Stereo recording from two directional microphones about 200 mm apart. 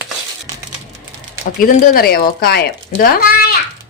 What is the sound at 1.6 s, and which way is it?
Speech, 50° left (ahead or behind).